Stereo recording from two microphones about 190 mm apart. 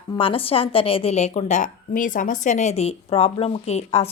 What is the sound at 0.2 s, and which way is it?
A woman's voice, 30° left (ahead or behind).